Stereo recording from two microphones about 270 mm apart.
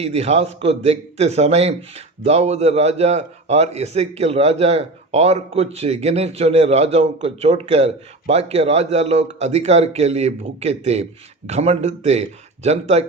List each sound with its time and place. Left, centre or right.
0.0 s a man's voice: right